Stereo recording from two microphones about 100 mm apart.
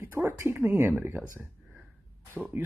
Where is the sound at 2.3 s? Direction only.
20° right (ahead or behind).